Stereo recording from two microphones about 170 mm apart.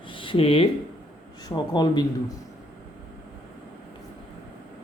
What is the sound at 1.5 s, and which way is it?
Speech, 25° left (ahead or behind).